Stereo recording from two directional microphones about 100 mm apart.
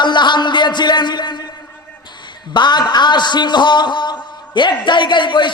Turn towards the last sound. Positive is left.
turn(degrees=55)  # may be behind; listen again after turning